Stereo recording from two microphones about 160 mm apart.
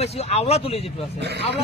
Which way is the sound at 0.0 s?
40° left (ahead or behind).